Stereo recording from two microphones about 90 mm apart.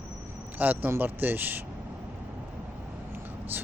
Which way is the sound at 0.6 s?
20° right (ahead or behind).